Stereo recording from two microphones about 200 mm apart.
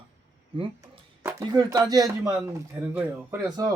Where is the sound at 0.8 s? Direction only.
15° right (ahead or behind).